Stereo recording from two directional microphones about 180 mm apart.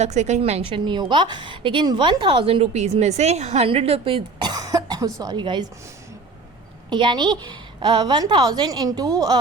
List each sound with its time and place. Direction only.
0.0 s a woman's voice: 40° right (ahead or behind); by 5.6 s 25° right (ahead or behind)
6.9 s a woman's voice: 25° right (ahead or behind)